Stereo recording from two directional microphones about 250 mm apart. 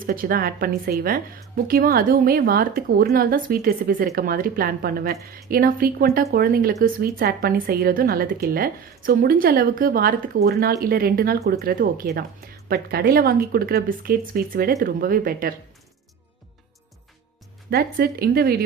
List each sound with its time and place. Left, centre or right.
0.1 s a woman's voice: right
17.7 s a woman's voice: right